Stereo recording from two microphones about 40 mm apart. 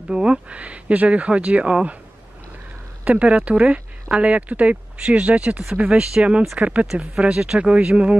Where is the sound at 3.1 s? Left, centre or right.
Right.